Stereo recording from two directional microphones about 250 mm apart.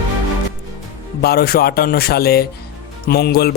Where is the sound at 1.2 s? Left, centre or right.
Left.